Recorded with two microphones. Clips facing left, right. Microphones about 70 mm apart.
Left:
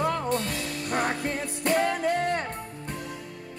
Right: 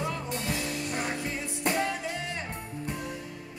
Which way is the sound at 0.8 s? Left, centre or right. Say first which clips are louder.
Left 5 dB; left.